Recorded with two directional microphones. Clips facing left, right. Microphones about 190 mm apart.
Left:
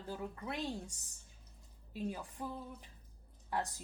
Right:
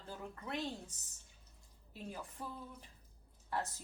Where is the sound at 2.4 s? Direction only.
15° left (ahead or behind).